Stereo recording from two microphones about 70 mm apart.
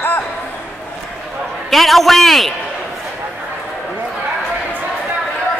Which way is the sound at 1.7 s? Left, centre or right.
Centre.